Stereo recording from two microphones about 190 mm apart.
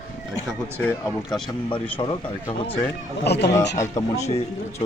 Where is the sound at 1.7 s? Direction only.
25° left (ahead or behind).